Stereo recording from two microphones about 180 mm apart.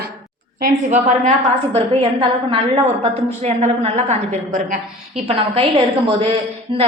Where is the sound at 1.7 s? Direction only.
30° right (ahead or behind).